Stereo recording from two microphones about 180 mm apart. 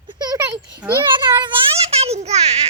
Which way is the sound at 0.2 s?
20° right (ahead or behind).